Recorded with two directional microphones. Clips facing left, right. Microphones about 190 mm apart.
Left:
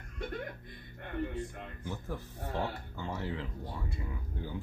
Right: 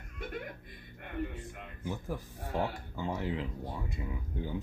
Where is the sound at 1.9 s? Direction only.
10° right (ahead or behind).